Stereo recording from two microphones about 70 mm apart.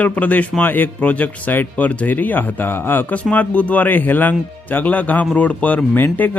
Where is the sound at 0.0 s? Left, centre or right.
Left.